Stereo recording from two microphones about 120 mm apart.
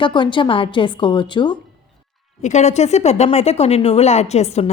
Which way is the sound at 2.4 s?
80° left.